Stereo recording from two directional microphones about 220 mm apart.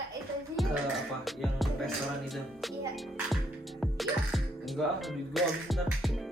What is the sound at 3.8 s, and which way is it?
Speech, centre (ahead or behind).